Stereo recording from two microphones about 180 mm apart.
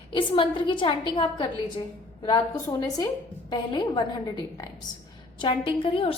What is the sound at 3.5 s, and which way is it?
A woman's voice, 25° left (ahead or behind).